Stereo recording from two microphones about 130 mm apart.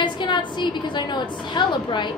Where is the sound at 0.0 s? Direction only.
35° left (ahead or behind).